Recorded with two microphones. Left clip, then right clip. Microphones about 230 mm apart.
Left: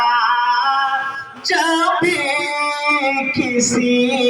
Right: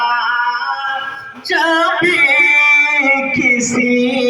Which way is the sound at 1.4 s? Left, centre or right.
Left.